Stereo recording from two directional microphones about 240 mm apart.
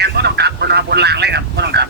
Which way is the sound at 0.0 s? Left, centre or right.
Right.